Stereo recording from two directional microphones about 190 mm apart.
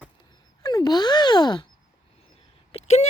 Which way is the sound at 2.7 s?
35° left (ahead or behind).